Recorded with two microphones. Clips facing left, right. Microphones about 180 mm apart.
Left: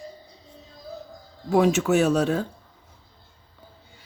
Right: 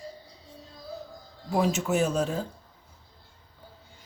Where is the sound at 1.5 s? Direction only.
70° left (ahead or behind).